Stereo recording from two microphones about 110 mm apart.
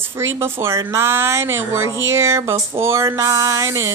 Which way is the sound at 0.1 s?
20° right (ahead or behind).